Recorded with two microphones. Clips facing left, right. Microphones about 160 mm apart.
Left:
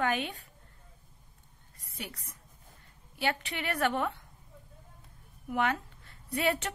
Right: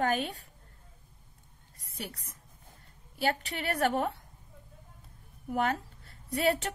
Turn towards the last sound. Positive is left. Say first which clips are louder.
# right 2 dB
turn(degrees=-40)  # may be behind; listen again after turning